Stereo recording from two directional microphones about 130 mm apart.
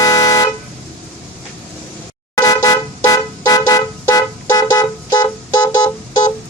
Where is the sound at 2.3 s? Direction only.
30° left (ahead or behind).